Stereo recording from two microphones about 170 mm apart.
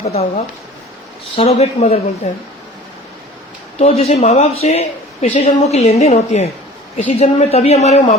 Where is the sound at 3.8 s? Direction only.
35° left (ahead or behind).